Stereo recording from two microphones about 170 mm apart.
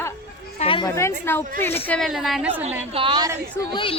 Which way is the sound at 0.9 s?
15° left (ahead or behind).